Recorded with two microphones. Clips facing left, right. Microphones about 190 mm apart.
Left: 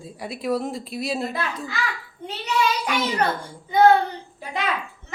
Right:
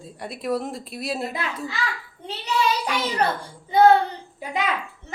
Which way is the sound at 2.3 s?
30° right (ahead or behind).